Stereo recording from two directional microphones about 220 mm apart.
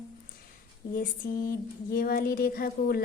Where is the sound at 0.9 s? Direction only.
40° left (ahead or behind).